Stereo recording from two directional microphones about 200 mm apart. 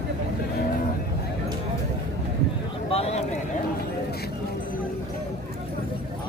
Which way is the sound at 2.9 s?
30° left (ahead or behind).